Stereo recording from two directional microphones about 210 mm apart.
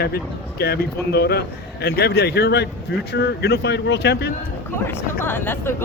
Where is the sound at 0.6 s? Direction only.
50° left (ahead or behind).